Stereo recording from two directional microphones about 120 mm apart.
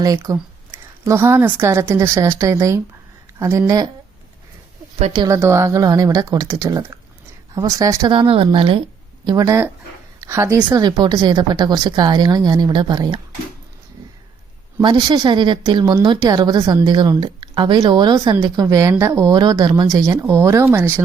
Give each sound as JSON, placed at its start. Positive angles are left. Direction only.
{"t": 0.0, "sound": "a woman's voice", "side_deg": -30}
{"t": 5.3, "sound": "a woman's voice", "side_deg": -25}
{"t": 8.1, "sound": "speech", "side_deg": -50}
{"t": 9.2, "sound": "a woman's voice", "side_deg": -30}
{"t": 14.8, "sound": "a woman's voice", "side_deg": -40}
{"t": 19.3, "sound": "a woman's voice", "side_deg": -35}